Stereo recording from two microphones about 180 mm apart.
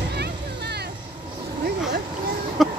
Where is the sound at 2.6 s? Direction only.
Centre (ahead or behind).